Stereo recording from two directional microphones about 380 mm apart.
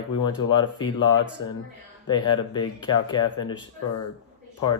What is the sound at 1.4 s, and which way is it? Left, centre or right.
Speech, left.